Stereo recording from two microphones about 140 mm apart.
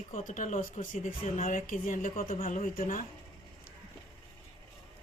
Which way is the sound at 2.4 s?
65° left (ahead or behind).